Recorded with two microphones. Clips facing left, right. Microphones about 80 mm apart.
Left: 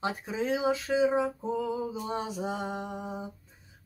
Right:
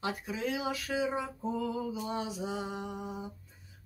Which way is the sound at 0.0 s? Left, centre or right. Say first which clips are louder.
Left 3 dB; left.